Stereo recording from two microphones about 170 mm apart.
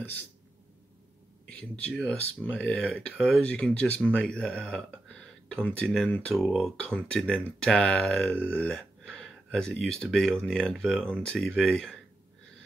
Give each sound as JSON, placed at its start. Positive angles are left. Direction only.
{"t": 1.5, "sound": "speech", "side_deg": 5}